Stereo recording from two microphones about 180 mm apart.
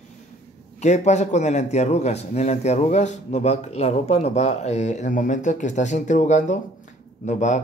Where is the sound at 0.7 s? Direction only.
40° left (ahead or behind).